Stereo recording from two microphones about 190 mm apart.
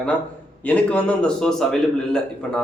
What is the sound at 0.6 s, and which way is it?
A man's voice, 5° left (ahead or behind).